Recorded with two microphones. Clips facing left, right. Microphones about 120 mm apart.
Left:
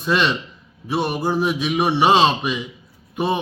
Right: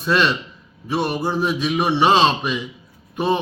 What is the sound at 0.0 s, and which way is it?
A man's voice, 15° left (ahead or behind).